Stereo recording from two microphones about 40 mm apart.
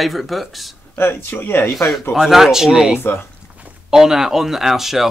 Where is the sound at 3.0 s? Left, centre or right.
Left.